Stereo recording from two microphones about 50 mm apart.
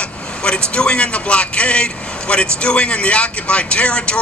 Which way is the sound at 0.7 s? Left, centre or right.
Centre.